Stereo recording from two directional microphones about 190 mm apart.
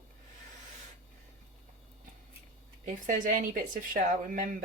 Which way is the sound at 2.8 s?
45° right (ahead or behind).